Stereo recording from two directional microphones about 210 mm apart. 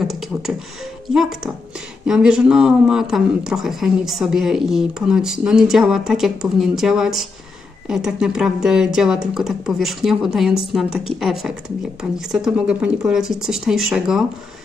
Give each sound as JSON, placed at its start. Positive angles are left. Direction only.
{"t": 0.0, "sound": "beatboxing", "side_deg": 0}
{"t": 2.0, "sound": "speech", "side_deg": -5}